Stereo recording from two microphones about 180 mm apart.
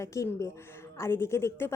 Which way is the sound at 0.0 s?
15° left (ahead or behind).